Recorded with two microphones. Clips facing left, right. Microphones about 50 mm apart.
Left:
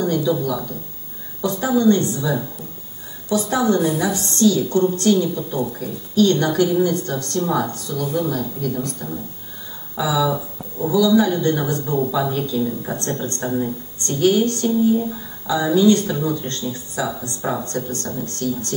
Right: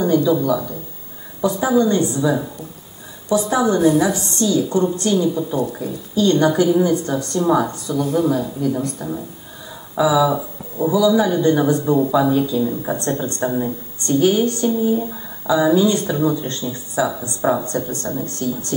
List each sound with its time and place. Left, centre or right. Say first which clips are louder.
0.4 s speech: right 4 dB; centre